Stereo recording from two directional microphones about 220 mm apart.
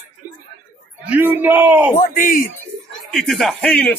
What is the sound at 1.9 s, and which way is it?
Speech, 35° left (ahead or behind).